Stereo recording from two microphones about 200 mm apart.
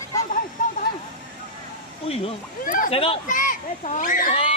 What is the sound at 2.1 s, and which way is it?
Speech, 25° left (ahead or behind).